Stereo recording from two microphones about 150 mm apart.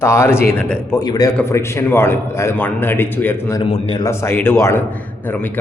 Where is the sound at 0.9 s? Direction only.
25° left (ahead or behind).